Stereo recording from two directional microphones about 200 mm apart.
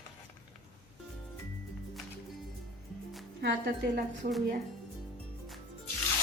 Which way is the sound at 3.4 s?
55° right (ahead or behind).